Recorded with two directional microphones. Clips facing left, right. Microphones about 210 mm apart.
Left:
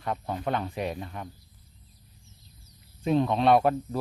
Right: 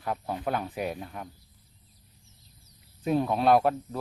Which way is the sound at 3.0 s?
5° right (ahead or behind).